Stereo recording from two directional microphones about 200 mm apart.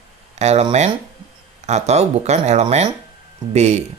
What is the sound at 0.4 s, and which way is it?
Speech, 35° right (ahead or behind).